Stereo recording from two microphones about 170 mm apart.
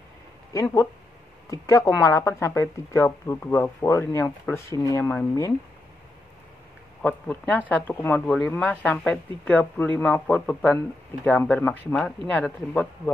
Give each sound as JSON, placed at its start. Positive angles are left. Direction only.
{"t": 0.5, "sound": "speech", "side_deg": 20}
{"t": 7.0, "sound": "speech", "side_deg": 10}